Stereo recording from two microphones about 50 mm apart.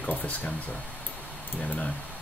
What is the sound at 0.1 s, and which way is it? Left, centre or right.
Speech, left.